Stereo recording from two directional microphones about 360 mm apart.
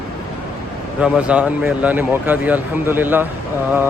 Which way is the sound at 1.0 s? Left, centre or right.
Centre.